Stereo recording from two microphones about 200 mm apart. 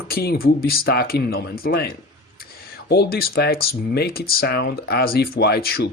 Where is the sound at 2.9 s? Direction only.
50° left (ahead or behind).